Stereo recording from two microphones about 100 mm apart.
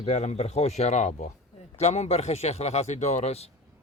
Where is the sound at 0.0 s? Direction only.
90° left.